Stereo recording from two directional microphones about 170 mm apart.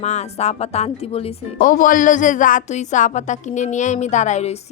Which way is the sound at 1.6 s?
55° left (ahead or behind).